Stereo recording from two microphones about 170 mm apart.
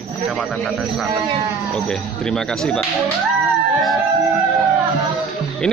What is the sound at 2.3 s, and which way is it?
Speech, 5° left (ahead or behind).